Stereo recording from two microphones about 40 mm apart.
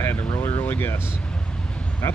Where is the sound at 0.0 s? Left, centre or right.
Left.